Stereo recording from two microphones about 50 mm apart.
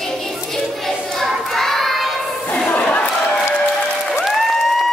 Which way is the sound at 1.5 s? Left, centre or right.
Centre.